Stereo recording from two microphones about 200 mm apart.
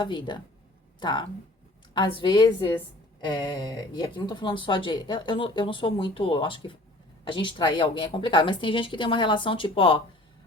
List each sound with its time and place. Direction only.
0.0 s a woman's voice: 25° left (ahead or behind)